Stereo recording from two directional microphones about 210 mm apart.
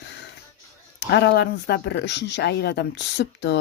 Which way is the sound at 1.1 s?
55° left (ahead or behind).